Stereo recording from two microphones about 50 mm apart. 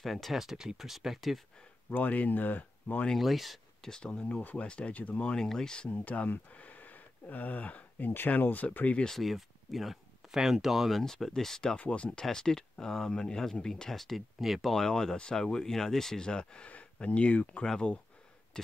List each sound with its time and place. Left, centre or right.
0.0 s speech: centre
1.9 s speech: left
3.2 s speech: centre
3.9 s speech: centre
4.4 s speech: left
4.6 s speech: left
5.3 s speech: centre
5.9 s speech: left
9.0 s speech: centre
11.7 s speech: left
12.3 s speech: centre
14.7 s speech: centre; by 17.6 s left